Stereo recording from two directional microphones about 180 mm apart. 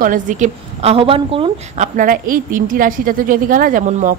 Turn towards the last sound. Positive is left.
turn(degrees=-45)  # may be behind; listen again after turning